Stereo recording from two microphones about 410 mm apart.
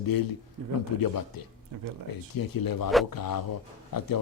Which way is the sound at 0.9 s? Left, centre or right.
Left.